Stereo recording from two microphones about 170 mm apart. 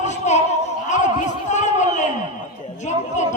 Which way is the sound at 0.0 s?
40° left (ahead or behind).